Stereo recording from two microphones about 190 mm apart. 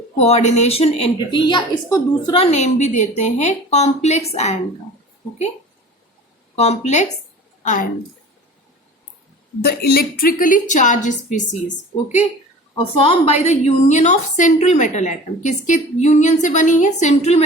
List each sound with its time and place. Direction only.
0.2 s a woman's voice: 35° left (ahead or behind)
6.6 s a woman's voice: 35° left (ahead or behind)
9.6 s a woman's voice: 55° left (ahead or behind)
13.0 s a woman's voice: 30° left (ahead or behind)